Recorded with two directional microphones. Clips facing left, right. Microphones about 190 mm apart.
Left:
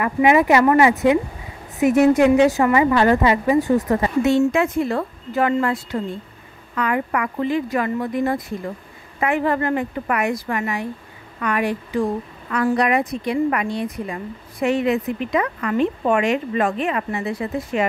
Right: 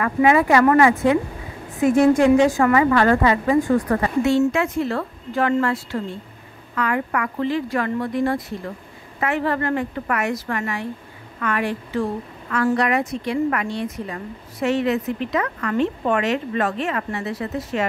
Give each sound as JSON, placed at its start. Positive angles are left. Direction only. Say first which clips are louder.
{"t": 0.0, "sound": "a woman's voice", "louder": "left 1 dB", "side_deg": 15}